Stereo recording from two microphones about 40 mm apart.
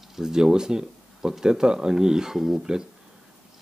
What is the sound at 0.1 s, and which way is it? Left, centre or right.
Speech, centre.